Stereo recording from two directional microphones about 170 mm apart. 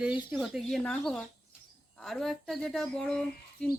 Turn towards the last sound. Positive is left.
turn(degrees=5)  # may be behind; listen again after turning